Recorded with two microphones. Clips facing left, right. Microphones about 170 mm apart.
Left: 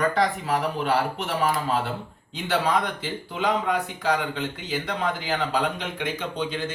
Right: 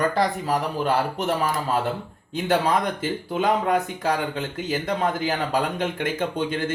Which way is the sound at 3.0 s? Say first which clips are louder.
Right 4 dB; 50° right (ahead or behind).